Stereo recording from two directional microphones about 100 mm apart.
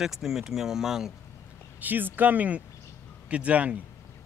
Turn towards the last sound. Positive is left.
turn(degrees=-15)  # may be behind; listen again after turning